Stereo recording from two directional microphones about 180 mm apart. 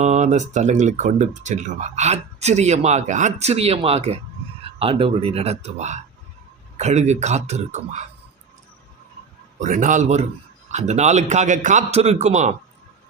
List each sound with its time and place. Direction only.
0.0 s speech: 40° right (ahead or behind)
9.6 s a man's voice: 45° right (ahead or behind)